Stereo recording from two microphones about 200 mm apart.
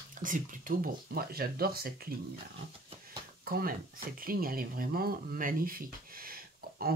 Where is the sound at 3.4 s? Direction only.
45° right (ahead or behind).